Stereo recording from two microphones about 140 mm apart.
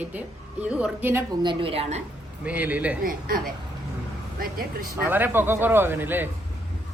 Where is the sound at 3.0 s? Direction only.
90° right.